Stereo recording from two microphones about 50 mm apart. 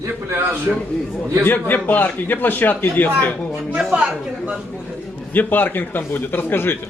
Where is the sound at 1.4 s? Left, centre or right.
Left.